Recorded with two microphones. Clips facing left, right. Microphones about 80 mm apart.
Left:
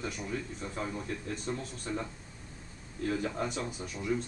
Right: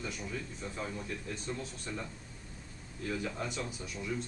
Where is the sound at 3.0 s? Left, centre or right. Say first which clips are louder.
Left 4 dB; left.